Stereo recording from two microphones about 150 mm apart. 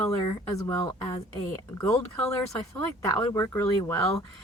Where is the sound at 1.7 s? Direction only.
10° left (ahead or behind).